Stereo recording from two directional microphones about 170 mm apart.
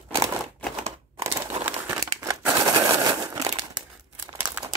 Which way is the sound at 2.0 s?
15° right (ahead or behind).